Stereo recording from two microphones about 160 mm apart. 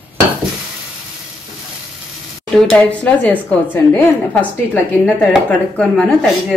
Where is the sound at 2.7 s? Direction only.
5° left (ahead or behind).